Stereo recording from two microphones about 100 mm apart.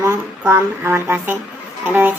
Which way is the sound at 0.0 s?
25° right (ahead or behind).